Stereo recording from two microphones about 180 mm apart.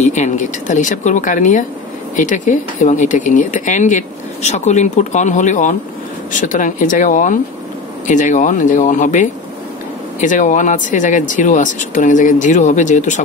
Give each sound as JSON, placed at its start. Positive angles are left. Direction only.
{"t": 0.0, "sound": "speech", "side_deg": 40}